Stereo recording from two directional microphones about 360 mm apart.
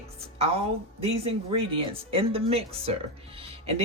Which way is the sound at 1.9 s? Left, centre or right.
Centre.